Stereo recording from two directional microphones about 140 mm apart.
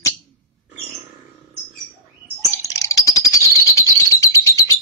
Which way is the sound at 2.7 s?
25° left (ahead or behind).